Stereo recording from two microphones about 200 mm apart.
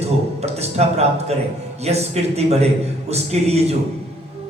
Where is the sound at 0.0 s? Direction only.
30° right (ahead or behind).